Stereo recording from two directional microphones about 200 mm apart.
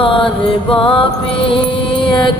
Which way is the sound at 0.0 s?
25° left (ahead or behind).